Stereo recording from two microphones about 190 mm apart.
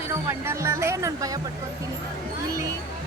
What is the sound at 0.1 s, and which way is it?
Speech, 15° right (ahead or behind).